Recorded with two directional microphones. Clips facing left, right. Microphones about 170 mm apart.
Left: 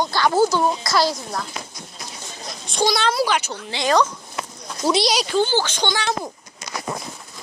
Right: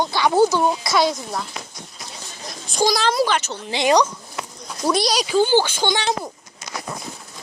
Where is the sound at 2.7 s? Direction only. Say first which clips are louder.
Right 1 dB; centre (ahead or behind).